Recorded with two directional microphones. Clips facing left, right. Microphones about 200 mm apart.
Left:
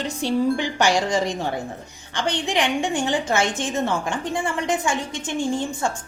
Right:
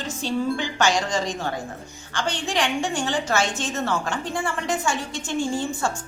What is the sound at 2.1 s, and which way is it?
A woman's voice, 20° left (ahead or behind).